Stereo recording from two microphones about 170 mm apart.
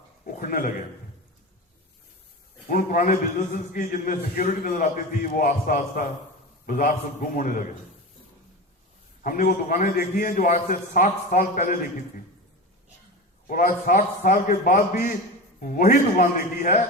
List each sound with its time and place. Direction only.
0.3 s a man's voice: 55° left (ahead or behind)
2.6 s a man's voice: 55° left (ahead or behind)
9.2 s a man's voice: 55° left (ahead or behind)
13.5 s a man's voice: 55° left (ahead or behind)